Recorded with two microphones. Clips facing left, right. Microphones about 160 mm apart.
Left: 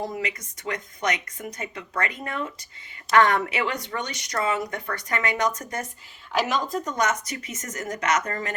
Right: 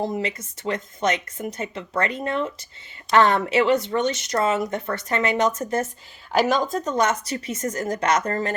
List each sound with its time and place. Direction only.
0.0 s speech: 25° right (ahead or behind)
6.9 s a woman's voice: 30° right (ahead or behind)